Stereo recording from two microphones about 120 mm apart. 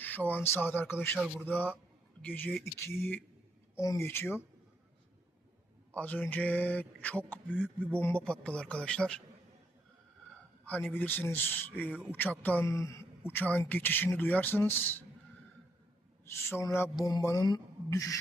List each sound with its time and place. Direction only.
0.0 s speech: 15° left (ahead or behind)
1.2 s speech: 10° right (ahead or behind)
2.2 s speech: 15° left (ahead or behind)
5.9 s speech: 10° left (ahead or behind)
10.7 s speech: 15° left (ahead or behind)
12.6 s speech: 25° left (ahead or behind)
16.2 s speech: 20° left (ahead or behind)
16.9 s speech: 35° left (ahead or behind)